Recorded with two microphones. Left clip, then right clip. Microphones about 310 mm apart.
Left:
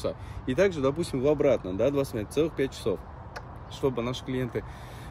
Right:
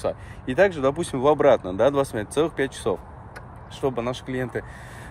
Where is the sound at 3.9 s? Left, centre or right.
Centre.